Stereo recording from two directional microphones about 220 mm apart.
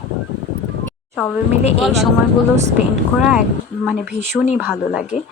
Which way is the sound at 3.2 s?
5° right (ahead or behind).